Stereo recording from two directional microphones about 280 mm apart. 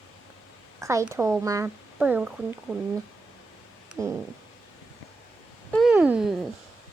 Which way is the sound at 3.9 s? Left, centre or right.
Centre.